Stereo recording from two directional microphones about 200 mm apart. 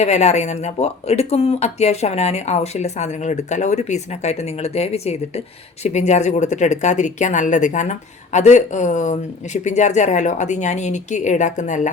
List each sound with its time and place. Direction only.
0.0 s speech: 35° left (ahead or behind)